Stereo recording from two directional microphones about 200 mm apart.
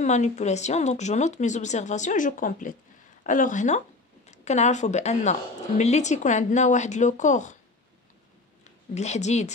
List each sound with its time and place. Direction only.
0.0 s a woman's voice: 35° left (ahead or behind)
8.9 s a woman's voice: 35° left (ahead or behind)